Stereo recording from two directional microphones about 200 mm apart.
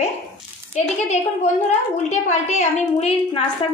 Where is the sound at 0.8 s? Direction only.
35° left (ahead or behind).